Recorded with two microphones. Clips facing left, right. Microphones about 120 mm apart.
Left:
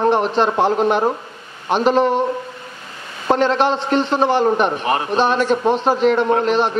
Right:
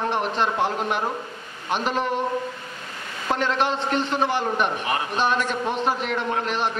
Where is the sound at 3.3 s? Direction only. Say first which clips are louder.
Left 7 dB; 30° left (ahead or behind).